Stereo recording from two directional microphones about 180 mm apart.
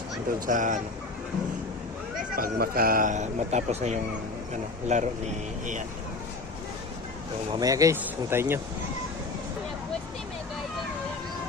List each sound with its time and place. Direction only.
0.3 s speech: 50° right (ahead or behind)
2.3 s speech: 55° right (ahead or behind)
7.5 s speech: 20° right (ahead or behind)